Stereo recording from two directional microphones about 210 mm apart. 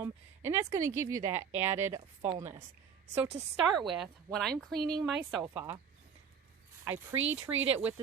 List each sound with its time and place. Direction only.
0.4 s speech: 15° right (ahead or behind)
3.2 s a woman's voice: 30° right (ahead or behind)
3.8 s speech: centre (ahead or behind)
6.8 s speech: 10° right (ahead or behind)